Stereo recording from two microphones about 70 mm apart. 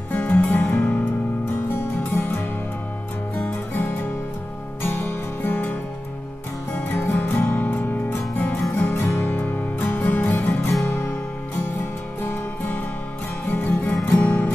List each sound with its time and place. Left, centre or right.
0.1 s music: left
3.4 s music: left
6.8 s music: left
9.0 s music: left
9.3 s music: left
12.2 s music: left